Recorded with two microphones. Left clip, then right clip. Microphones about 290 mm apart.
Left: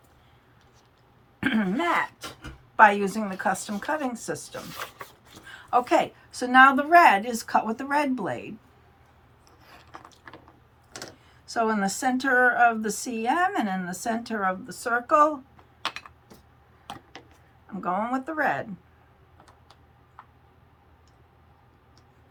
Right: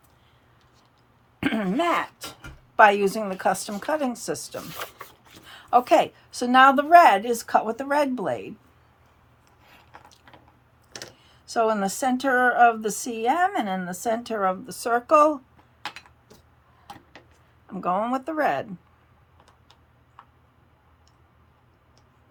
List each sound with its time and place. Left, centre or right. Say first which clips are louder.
1.4 s a sound: right 1 dB; right
2.7 s a woman's voice: right 1 dB; right
11.5 s a woman's voice: right 3 dB; right
17.7 s a woman's voice: right 3 dB; right